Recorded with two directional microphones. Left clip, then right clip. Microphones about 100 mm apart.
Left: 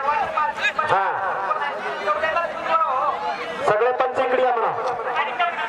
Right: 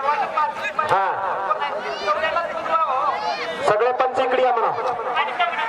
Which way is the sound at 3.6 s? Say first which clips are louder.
Even; 20° right (ahead or behind).